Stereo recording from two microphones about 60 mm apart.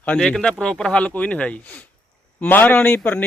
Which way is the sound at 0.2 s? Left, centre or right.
Centre.